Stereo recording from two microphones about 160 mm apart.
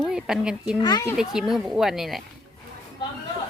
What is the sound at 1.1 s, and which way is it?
A woman's voice, 5° right (ahead or behind).